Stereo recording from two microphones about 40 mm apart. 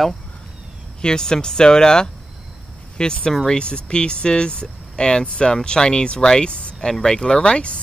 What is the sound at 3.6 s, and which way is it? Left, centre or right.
Speech, left.